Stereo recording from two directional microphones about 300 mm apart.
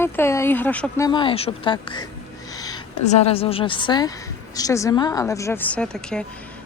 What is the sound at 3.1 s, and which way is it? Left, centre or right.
A man's voice, left.